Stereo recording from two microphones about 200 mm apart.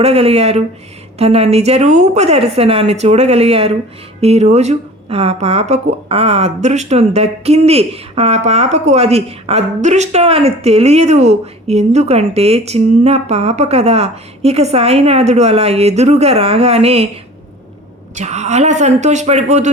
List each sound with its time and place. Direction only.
0.0 s speech: 30° right (ahead or behind)
18.1 s speech: 35° right (ahead or behind)